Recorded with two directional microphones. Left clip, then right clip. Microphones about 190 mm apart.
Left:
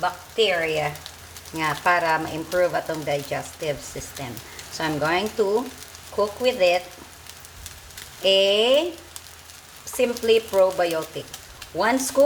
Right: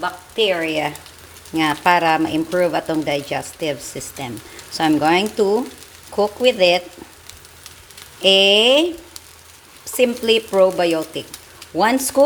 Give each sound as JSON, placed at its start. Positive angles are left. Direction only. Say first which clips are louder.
{"t": 0.0, "sound": "speech", "louder": "right 2 dB", "side_deg": -50}
{"t": 8.2, "sound": "speech", "louder": "right 6 dB", "side_deg": -45}
{"t": 10.0, "sound": "speech", "louder": "right 3 dB", "side_deg": -50}